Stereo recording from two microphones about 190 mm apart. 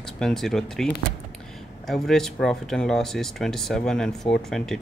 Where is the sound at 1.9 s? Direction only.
Centre (ahead or behind).